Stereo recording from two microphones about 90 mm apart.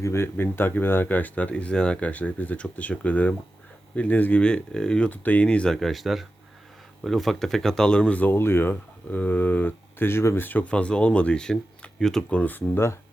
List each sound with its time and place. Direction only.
0.0 s speech: 30° left (ahead or behind)
8.3 s speech: 25° left (ahead or behind); by 12.4 s 5° left (ahead or behind)
12.4 s speech: 20° left (ahead or behind)